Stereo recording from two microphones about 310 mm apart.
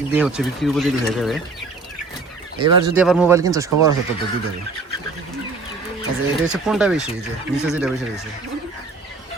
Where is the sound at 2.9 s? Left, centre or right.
Centre.